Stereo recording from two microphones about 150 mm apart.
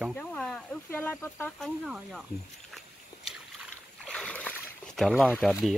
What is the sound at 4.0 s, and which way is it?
Boat, 5° left (ahead or behind).